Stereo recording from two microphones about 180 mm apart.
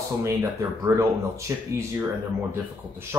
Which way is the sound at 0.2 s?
15° right (ahead or behind).